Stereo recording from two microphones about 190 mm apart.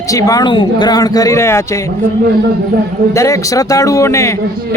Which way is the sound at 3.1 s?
15° left (ahead or behind).